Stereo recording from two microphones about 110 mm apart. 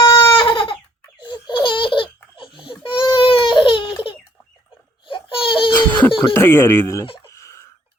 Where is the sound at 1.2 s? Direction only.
45° left (ahead or behind).